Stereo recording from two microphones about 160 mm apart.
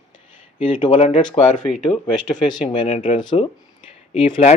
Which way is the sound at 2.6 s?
35° left (ahead or behind).